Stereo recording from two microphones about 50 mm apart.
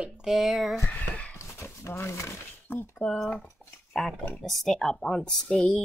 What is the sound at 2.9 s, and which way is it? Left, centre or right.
Speech, centre.